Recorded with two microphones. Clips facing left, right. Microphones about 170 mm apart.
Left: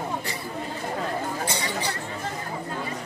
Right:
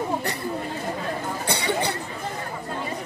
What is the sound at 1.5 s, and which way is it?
Chatter, 65° right (ahead or behind).